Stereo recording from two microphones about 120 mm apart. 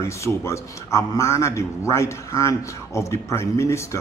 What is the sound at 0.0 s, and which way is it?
A man's voice, 25° left (ahead or behind).